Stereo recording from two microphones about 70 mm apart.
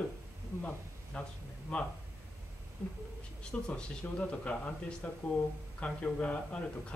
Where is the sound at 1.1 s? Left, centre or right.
Centre.